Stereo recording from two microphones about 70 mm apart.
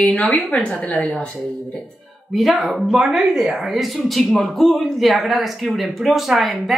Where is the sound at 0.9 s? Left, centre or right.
Centre.